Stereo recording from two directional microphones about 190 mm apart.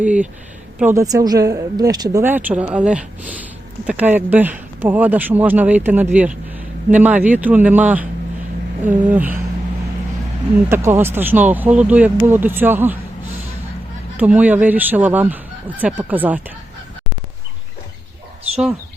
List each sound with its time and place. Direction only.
0.0 s a woman's voice: 5° right (ahead or behind)
10.7 s a woman's voice: 15° right (ahead or behind)
14.2 s a woman's voice: 10° right (ahead or behind)